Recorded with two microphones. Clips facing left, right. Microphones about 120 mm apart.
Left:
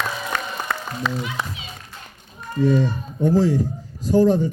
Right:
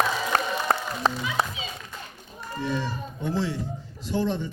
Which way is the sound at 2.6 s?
45° left (ahead or behind).